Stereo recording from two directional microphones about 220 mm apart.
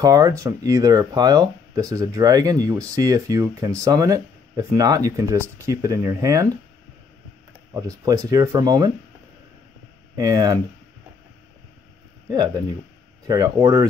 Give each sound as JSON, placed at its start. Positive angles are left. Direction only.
{"t": 0.0, "sound": "speech", "side_deg": -15}
{"t": 7.7, "sound": "speech", "side_deg": -15}
{"t": 10.2, "sound": "speech", "side_deg": -15}
{"t": 13.3, "sound": "speech", "side_deg": -15}